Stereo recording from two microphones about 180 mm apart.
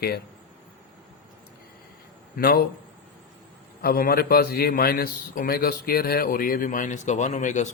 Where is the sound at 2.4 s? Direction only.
55° left (ahead or behind).